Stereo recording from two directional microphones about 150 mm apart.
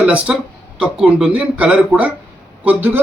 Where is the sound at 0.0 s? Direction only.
10° right (ahead or behind).